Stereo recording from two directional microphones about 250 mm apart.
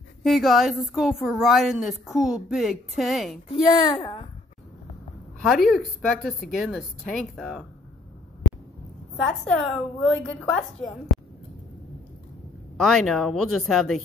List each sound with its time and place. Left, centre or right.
0.2 s a woman's voice: centre
3.4 s speech: left
5.4 s a woman's voice: centre
9.2 s a woman's voice: centre
12.7 s a woman's voice: centre